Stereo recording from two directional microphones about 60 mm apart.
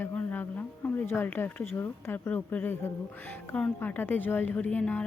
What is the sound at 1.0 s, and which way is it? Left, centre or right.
Speech, left.